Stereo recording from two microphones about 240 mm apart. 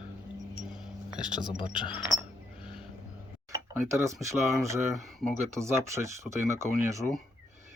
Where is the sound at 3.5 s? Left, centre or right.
Centre.